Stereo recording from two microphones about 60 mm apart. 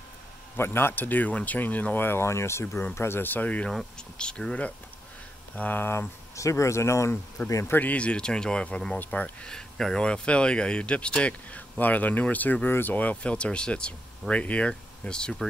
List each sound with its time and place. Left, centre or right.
0.6 s speech: left
6.3 s speech: left
7.7 s speech: left
9.5 s speech: centre